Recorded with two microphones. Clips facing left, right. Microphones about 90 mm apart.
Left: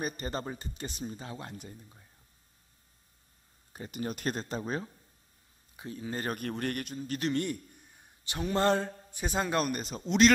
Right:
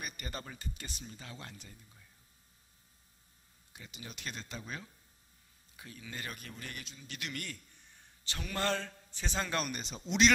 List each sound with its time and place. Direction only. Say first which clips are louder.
0.0 s speech: left 9 dB; 35° left (ahead or behind)
3.7 s a man's voice: left 13 dB; 45° left (ahead or behind)
7.4 s a sound: left 12 dB; 15° left (ahead or behind)
8.4 s mantra: left 8 dB; 25° left (ahead or behind)
9.1 s a man's voice: left 5 dB; 10° left (ahead or behind)